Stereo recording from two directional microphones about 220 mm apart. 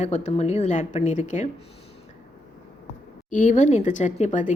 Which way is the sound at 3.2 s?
35° left (ahead or behind).